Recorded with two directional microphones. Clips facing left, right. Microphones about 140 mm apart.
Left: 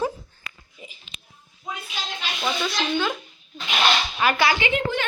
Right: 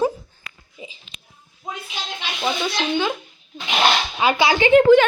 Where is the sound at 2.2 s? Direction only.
15° right (ahead or behind).